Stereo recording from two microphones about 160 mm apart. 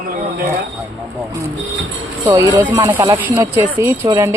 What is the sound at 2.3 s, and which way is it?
Speech, 20° right (ahead or behind).